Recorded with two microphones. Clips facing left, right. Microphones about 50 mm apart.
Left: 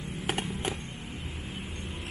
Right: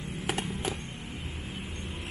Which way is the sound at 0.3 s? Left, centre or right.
Centre.